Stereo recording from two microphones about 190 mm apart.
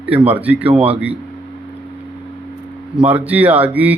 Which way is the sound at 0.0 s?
10° right (ahead or behind).